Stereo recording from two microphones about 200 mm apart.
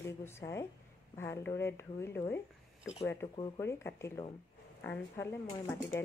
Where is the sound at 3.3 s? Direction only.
25° left (ahead or behind).